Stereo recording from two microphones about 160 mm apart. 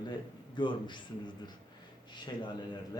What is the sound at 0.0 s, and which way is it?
Speech, 30° left (ahead or behind).